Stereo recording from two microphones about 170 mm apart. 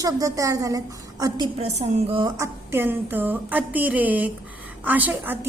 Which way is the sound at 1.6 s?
40° right (ahead or behind).